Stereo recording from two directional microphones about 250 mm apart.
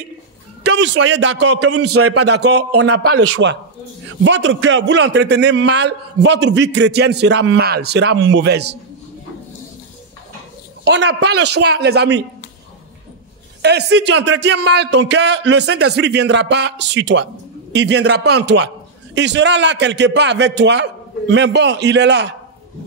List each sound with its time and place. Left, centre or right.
0.7 s a man's voice: right
1.8 s a man's voice: right
2.8 s a man's voice: right
10.8 s a man's voice: right
11.3 s a man's voice: right
11.6 s a man's voice: right
13.6 s a man's voice: right